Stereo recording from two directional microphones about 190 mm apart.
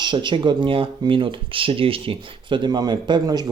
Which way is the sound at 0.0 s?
25° right (ahead or behind).